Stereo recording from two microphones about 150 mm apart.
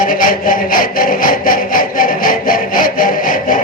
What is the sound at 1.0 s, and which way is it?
Wood, 70° left (ahead or behind).